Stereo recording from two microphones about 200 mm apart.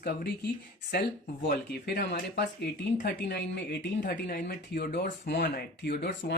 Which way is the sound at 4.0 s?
50° left (ahead or behind).